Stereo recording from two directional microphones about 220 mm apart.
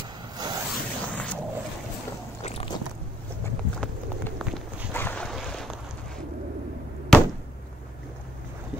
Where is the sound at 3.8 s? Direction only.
Centre (ahead or behind).